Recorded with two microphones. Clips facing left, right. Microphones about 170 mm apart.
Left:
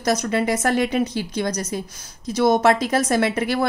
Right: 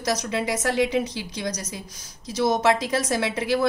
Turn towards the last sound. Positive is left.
turn(degrees=55)  # may be behind; listen again after turning